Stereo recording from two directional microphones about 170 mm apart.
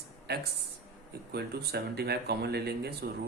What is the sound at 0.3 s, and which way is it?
Speech, 75° right (ahead or behind).